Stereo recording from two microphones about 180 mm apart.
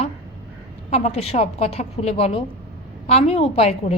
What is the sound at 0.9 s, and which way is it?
Speech, 35° left (ahead or behind).